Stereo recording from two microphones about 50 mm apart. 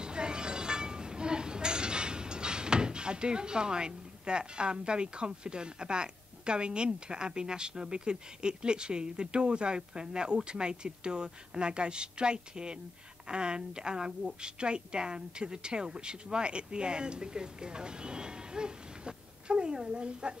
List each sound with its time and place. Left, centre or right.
0.0 s a woman's voice: centre